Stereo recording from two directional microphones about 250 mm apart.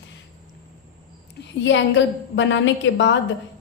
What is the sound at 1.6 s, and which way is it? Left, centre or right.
A woman's voice, left.